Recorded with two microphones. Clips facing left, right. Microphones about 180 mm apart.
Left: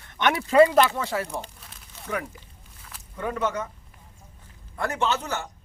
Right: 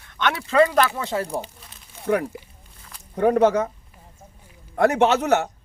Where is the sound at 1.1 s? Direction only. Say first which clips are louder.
Right 4 dB; 35° right (ahead or behind).